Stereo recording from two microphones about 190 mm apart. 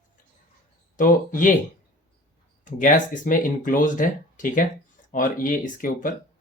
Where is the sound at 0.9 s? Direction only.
45° left (ahead or behind).